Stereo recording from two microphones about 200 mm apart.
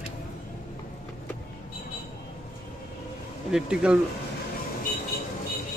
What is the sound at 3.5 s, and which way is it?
Speech, 5° right (ahead or behind).